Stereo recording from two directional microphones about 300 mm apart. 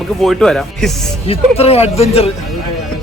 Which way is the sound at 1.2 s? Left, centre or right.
Centre.